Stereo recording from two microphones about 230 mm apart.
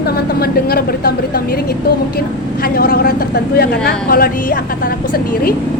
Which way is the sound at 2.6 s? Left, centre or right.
Left.